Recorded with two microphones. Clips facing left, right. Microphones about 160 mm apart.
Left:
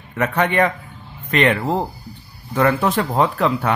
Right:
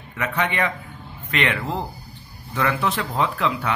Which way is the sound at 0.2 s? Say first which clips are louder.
Left 6 dB; 45° left (ahead or behind).